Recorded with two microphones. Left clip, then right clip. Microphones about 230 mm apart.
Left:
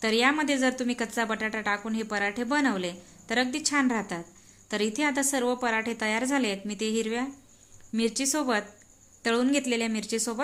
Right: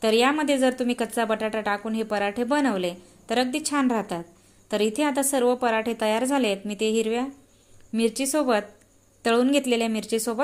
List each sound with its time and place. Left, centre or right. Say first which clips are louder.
0.0 s a woman's voice: right 3 dB; centre